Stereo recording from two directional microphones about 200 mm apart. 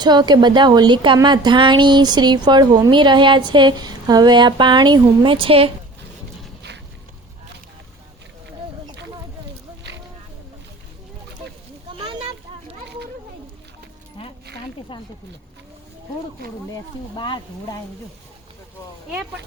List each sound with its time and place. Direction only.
0.0 s a woman's voice: 20° right (ahead or behind)
16.7 s speech: 25° left (ahead or behind)